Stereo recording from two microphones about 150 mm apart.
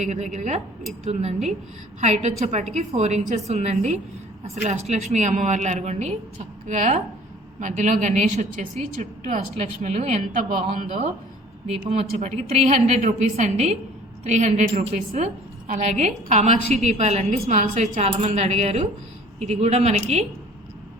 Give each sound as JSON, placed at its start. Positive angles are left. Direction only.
{"t": 0.0, "sound": "a woman's voice", "side_deg": -50}
{"t": 12.2, "sound": "a woman's voice", "side_deg": -50}